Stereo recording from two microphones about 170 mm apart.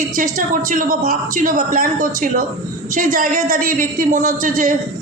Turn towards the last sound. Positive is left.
turn(degrees=-55)  # may be behind; listen again after turning